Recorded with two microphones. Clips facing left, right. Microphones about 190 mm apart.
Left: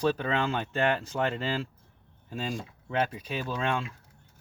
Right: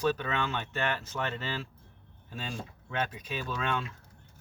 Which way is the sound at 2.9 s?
30° left (ahead or behind).